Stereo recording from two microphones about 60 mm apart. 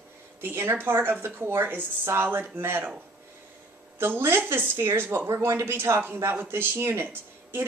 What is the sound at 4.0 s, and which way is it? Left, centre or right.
Speech, right.